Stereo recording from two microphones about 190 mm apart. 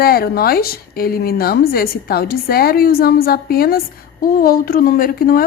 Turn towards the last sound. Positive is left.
turn(degrees=50)  # may be behind; listen again after turning